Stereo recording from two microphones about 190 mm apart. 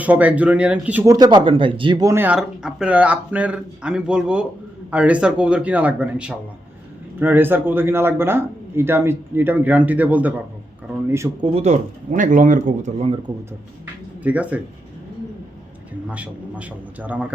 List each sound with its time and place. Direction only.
0.0 s speech: 10° right (ahead or behind)
1.1 s speech: 20° right (ahead or behind)
11.5 s speech: 35° right (ahead or behind)
14.3 s speech: 5° right (ahead or behind)
15.9 s speech: 5° right (ahead or behind)